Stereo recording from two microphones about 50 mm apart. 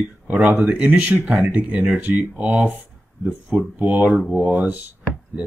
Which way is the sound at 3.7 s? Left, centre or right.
Right.